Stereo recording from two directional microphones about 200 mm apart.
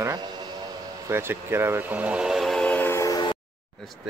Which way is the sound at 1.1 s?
10° right (ahead or behind).